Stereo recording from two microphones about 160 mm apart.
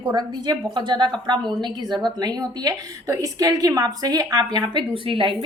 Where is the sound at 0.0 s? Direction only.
25° right (ahead or behind).